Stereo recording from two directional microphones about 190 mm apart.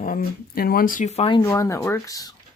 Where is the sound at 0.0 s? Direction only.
50° left (ahead or behind).